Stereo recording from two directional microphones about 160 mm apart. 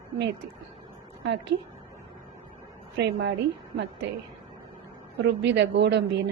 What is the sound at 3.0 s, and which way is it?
Speech, 90° right.